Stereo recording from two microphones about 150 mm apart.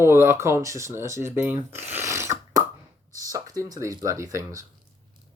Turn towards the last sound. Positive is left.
turn(degrees=-20)  # may be behind; listen again after turning